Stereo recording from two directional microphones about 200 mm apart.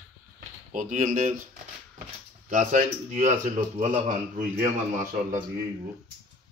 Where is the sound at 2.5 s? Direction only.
40° right (ahead or behind).